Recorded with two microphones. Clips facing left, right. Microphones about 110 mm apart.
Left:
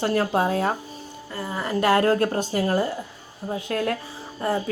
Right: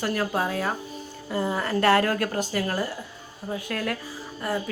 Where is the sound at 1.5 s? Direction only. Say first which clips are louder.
Left 1 dB; 15° left (ahead or behind).